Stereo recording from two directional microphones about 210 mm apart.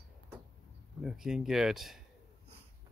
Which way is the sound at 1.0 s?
Centre (ahead or behind).